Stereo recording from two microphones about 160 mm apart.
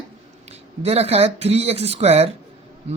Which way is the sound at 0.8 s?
40° right (ahead or behind).